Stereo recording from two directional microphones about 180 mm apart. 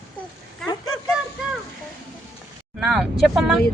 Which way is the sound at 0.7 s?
20° left (ahead or behind).